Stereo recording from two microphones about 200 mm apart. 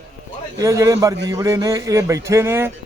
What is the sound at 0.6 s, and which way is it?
Speech, 15° right (ahead or behind).